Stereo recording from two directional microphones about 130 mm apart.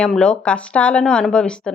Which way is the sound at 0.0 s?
5° left (ahead or behind).